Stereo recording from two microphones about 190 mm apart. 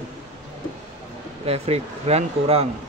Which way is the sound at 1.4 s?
30° right (ahead or behind).